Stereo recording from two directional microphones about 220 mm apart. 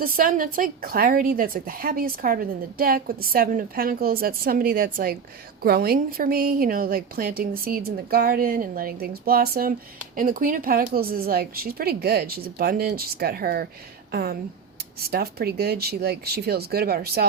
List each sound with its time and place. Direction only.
0.0 s a woman's voice: 40° right (ahead or behind)